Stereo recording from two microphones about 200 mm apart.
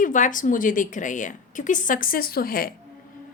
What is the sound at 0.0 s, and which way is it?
A woman's voice, 40° left (ahead or behind).